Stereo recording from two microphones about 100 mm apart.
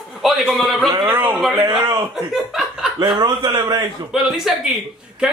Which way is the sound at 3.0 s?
45° right (ahead or behind).